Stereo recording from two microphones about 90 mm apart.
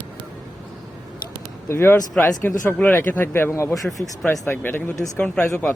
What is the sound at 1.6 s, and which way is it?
Speech, 25° left (ahead or behind).